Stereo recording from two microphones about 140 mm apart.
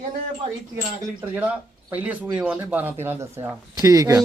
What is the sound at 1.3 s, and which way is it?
Speech, 10° right (ahead or behind).